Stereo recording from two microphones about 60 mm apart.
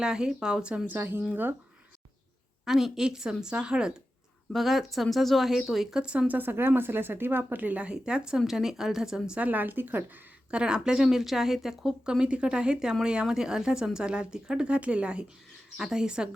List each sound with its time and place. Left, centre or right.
0.0 s speech: centre
0.9 s speech: right
2.6 s speech: centre
4.5 s speech: centre; by 7.9 s right
7.9 s speech: centre
9.4 s speech: right
10.5 s speech: centre
12.1 s speech: centre
15.8 s speech: centre